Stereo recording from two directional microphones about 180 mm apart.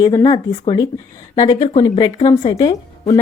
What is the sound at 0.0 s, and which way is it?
Speech, 20° left (ahead or behind).